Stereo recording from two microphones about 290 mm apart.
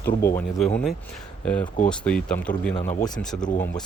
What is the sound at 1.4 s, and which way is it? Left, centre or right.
Speech, centre.